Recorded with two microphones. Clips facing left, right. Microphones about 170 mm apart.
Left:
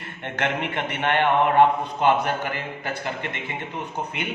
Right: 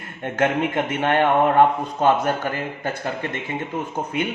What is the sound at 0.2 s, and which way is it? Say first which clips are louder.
Speech: right 6 dB; 45° right (ahead or behind).